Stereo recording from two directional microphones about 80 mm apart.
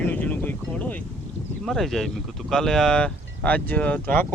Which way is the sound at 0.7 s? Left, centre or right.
Centre.